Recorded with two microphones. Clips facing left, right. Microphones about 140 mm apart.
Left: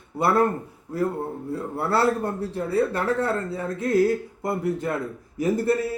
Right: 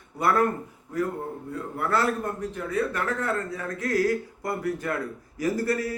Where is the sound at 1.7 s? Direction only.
30° left (ahead or behind).